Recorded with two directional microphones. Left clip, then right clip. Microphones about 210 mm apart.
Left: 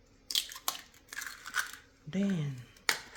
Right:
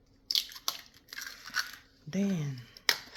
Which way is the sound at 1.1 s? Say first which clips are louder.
Even; centre (ahead or behind).